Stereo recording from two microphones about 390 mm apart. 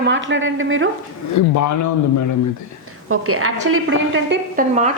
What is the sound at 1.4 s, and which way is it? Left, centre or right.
Speech, left.